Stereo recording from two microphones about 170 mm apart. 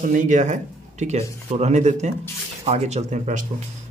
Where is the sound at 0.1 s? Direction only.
50° right (ahead or behind).